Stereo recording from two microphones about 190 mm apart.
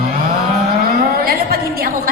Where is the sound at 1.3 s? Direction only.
50° right (ahead or behind).